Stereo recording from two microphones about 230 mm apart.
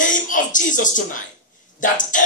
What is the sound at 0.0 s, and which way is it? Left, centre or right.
Speech, left.